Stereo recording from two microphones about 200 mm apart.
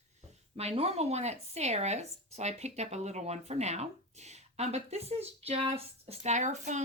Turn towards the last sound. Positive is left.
turn(degrees=-35)  # may be behind; listen again after turning